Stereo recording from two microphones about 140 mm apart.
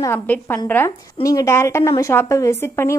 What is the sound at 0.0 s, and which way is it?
A woman's voice, 15° left (ahead or behind).